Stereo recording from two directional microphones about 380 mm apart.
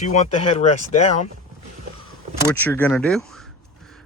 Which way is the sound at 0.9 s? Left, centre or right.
Centre.